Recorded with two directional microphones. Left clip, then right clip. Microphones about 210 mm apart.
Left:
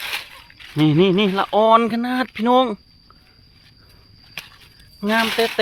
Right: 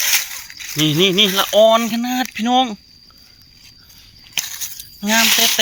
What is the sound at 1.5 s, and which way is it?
Speech, 25° left (ahead or behind).